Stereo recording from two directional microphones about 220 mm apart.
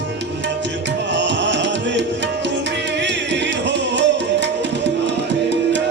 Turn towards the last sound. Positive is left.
turn(degrees=-55)  # may be behind; listen again after turning